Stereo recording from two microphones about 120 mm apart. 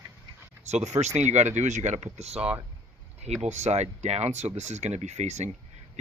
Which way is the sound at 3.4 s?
70° right (ahead or behind).